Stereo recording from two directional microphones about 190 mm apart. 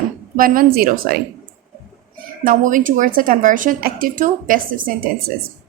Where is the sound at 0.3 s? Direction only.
50° right (ahead or behind).